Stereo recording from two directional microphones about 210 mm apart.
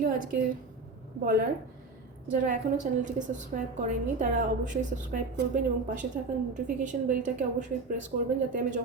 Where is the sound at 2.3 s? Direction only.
35° right (ahead or behind).